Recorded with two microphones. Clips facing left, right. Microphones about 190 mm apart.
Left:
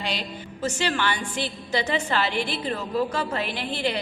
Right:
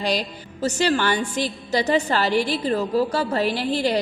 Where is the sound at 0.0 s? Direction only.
40° right (ahead or behind).